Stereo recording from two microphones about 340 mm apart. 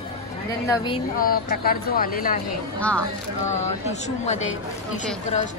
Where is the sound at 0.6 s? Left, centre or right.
Centre.